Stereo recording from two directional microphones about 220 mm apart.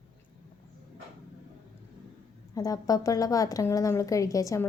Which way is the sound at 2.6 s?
15° left (ahead or behind).